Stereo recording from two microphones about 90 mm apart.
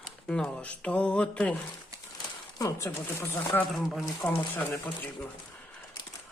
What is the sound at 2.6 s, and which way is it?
Speech, 35° left (ahead or behind).